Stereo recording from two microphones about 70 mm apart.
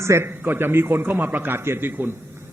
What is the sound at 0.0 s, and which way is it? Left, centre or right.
A man's voice, right.